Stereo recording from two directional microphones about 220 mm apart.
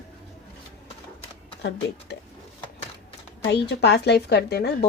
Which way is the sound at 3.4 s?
50° left (ahead or behind).